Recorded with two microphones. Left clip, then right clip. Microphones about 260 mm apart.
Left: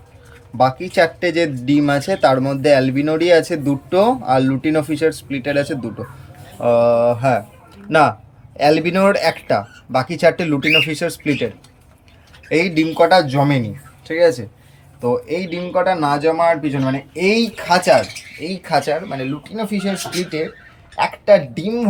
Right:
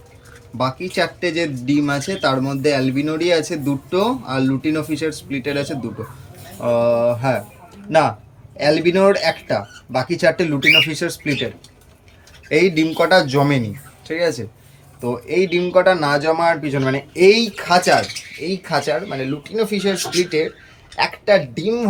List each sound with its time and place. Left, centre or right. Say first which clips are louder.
0.5 s speech: left 6 dB; centre
12.5 s speech: right 1 dB; centre
20.9 s speech: left 3 dB; centre